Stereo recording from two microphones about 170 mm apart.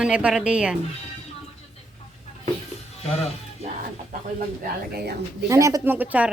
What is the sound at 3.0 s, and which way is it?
Speech, 35° left (ahead or behind).